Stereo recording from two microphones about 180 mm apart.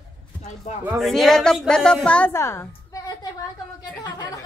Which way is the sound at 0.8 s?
Centre (ahead or behind).